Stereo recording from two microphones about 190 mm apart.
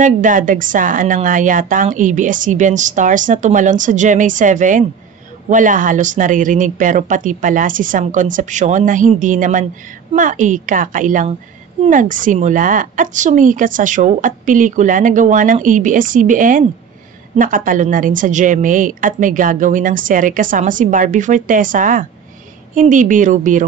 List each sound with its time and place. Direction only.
0.0 s a woman's voice: 45° right (ahead or behind)